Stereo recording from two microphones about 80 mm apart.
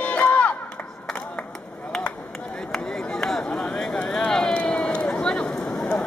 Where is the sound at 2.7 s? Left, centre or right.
Centre.